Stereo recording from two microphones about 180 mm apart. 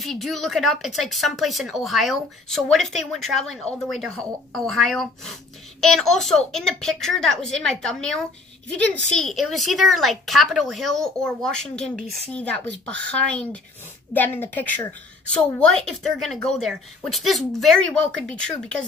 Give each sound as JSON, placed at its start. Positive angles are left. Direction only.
{"t": 0.0, "sound": "speech", "side_deg": 0}